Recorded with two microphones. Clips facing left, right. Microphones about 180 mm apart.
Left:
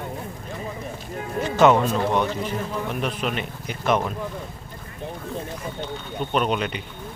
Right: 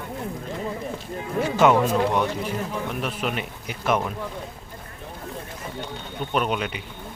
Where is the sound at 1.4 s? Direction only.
10° right (ahead or behind).